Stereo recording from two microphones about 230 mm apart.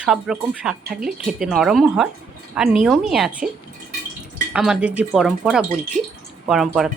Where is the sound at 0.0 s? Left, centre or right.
Centre.